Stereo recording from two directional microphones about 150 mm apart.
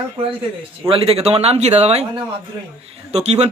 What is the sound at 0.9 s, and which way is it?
A man's voice, 40° right (ahead or behind).